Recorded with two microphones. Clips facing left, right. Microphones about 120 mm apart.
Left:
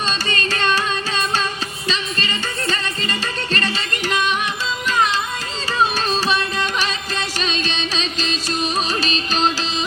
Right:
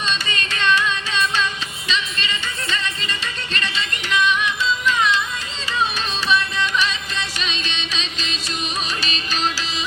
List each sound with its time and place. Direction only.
0.1 s music: 40° left (ahead or behind)